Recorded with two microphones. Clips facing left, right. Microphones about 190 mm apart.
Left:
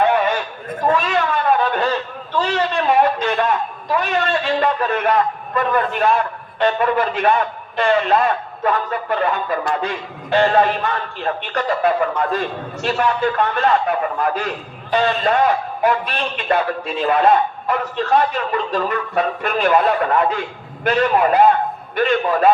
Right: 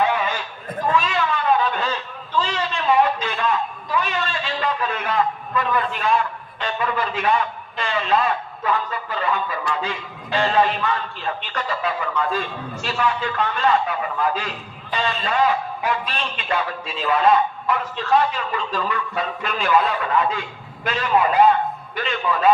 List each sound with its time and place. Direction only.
0.0 s horse: 55° left (ahead or behind)
0.9 s cat: 55° left (ahead or behind)
2.4 s a man's voice: 60° left (ahead or behind)